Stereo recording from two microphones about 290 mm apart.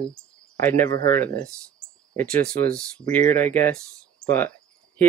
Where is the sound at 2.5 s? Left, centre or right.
Right.